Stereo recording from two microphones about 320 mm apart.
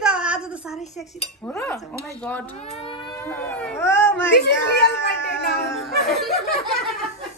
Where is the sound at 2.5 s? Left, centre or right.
Centre.